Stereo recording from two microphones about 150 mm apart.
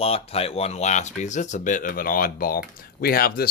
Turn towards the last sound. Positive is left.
turn(degrees=90)